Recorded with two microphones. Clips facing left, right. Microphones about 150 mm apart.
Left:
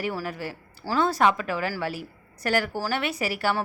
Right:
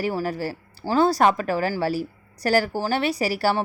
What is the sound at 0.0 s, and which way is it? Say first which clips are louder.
A woman's voice: right 5 dB; 35° right (ahead or behind).